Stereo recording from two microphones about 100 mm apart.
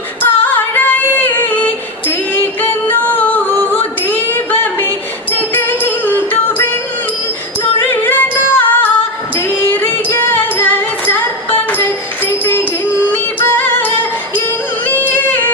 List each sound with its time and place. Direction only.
0.2 s female singing: 20° left (ahead or behind)
4.0 s a sound: 20° left (ahead or behind)
4.6 s music: 20° left (ahead or behind)
7.8 s music: 20° left (ahead or behind)